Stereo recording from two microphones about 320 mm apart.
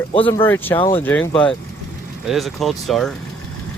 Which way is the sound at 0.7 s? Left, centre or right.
Centre.